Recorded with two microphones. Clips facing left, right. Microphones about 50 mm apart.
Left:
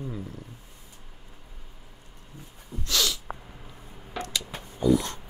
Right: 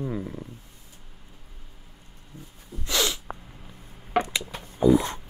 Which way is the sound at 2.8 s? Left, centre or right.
Right.